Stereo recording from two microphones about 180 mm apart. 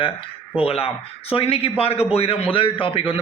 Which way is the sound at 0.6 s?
35° left (ahead or behind).